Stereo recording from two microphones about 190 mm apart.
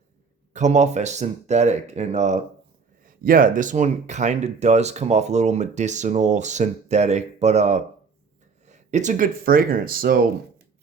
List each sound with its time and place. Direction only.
0.5 s speech: 40° right (ahead or behind)